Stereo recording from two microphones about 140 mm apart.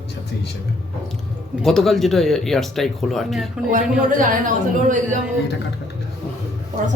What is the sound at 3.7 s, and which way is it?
A man's voice, 75° right (ahead or behind).